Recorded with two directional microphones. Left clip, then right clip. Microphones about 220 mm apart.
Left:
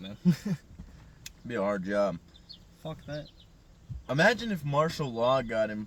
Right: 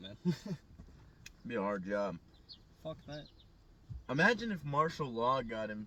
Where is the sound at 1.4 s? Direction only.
30° left (ahead or behind).